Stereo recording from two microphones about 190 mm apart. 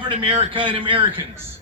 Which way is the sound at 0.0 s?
25° right (ahead or behind).